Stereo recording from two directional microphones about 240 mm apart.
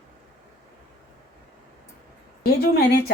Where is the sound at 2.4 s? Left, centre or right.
Left.